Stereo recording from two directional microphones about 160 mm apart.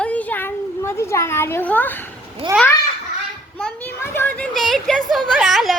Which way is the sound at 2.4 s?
35° right (ahead or behind).